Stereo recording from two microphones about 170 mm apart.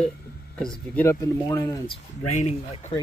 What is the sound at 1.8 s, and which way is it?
Speech, 40° left (ahead or behind).